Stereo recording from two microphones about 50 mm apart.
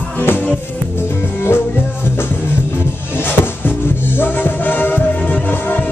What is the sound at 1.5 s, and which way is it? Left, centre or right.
Music, left.